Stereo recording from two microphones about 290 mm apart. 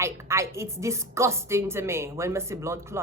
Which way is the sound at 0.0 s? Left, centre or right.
Centre.